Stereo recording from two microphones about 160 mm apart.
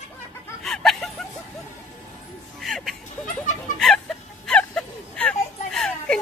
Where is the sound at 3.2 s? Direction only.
50° left (ahead or behind).